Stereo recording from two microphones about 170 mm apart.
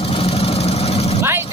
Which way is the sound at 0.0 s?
35° left (ahead or behind).